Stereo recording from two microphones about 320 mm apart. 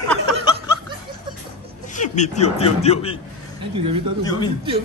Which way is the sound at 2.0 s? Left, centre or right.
Left.